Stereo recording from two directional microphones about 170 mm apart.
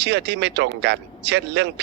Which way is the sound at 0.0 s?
90° right.